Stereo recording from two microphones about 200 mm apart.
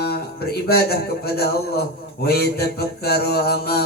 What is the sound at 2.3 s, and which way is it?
A man's voice, 50° left (ahead or behind).